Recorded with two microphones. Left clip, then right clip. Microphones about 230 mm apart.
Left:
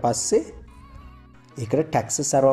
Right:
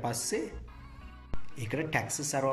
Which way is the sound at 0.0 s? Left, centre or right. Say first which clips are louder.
Left 13 dB; centre.